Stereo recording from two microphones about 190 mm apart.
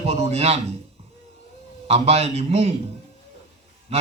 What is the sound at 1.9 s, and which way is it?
Speech, 35° right (ahead or behind).